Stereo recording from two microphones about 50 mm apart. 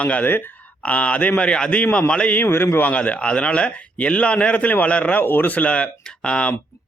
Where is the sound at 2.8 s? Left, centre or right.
Left.